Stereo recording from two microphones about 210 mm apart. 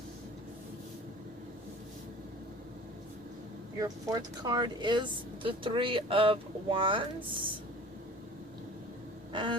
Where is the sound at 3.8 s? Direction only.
15° right (ahead or behind).